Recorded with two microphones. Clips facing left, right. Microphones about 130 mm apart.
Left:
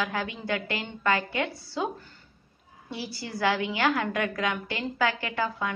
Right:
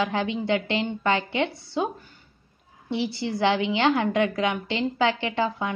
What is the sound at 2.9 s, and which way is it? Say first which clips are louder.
A woman's voice: right 9 dB; 20° right (ahead or behind).